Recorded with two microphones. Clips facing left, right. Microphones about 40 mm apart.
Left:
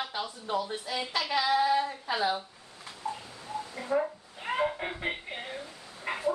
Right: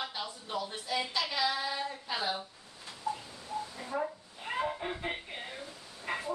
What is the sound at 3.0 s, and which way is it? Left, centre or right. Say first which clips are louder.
Bird: even; left.